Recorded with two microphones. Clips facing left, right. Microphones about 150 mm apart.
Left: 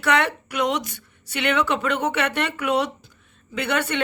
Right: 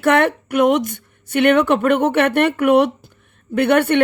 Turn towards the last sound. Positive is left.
turn(degrees=-60)  # may be behind; listen again after turning